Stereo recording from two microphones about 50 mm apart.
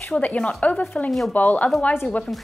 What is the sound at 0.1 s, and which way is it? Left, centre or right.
A woman's voice, left.